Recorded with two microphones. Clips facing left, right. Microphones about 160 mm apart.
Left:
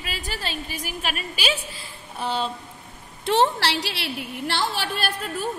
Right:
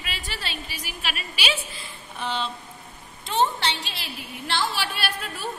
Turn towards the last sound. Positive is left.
turn(degrees=45)  # may be behind; listen again after turning